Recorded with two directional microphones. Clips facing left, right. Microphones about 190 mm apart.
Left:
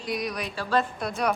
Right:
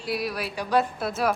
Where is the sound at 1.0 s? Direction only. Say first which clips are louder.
Right 1 dB; 5° right (ahead or behind).